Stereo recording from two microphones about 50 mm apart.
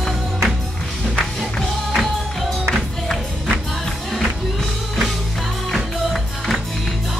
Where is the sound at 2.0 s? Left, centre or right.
Centre.